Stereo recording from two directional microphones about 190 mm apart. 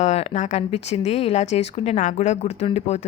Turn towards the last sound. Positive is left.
turn(degrees=35)  # may be behind; listen again after turning